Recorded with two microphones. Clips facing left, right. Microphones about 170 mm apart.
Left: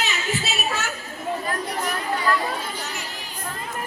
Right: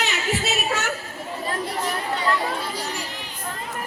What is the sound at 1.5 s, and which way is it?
Chatter, 25° right (ahead or behind).